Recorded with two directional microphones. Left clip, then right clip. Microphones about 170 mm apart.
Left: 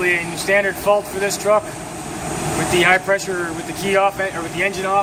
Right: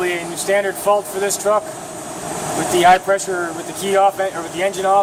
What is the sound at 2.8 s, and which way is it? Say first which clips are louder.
Speech: right 4 dB; 55° right (ahead or behind).